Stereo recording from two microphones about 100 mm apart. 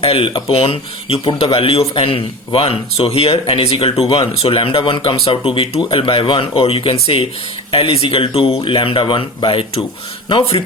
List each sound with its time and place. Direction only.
0.0 s speech: 70° left (ahead or behind)
4.1 s speech: 70° left (ahead or behind)
8.6 s speech: 60° left (ahead or behind)